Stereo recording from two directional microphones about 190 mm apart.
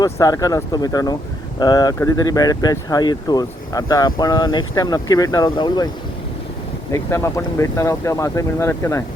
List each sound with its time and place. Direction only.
0.0 s speech: 20° left (ahead or behind)
6.9 s speech: 15° left (ahead or behind)